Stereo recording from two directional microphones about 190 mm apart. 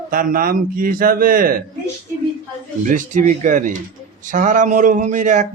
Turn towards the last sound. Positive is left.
turn(degrees=-40)  # may be behind; listen again after turning